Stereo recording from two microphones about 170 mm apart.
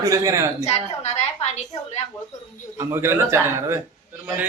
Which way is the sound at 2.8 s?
15° right (ahead or behind).